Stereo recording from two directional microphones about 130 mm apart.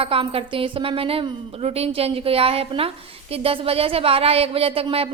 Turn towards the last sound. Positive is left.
turn(degrees=-45)  # may be behind; listen again after turning